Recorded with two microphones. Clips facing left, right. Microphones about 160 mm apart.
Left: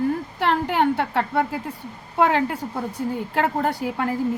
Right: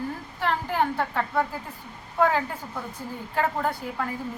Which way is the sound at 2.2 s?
85° left.